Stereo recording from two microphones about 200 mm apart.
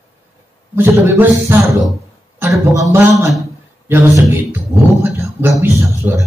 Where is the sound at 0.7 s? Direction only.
10° right (ahead or behind).